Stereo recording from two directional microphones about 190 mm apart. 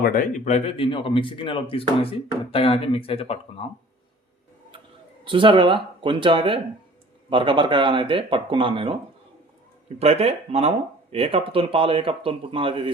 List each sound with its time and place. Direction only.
0.0 s speech: 45° left (ahead or behind); by 3.7 s 30° left (ahead or behind)
5.2 s speech: 25° right (ahead or behind)
10.0 s speech: 30° right (ahead or behind)